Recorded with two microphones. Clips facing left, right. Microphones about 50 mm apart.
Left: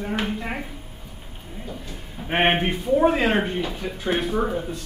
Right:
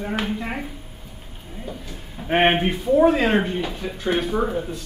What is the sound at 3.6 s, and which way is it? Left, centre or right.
Speech, centre.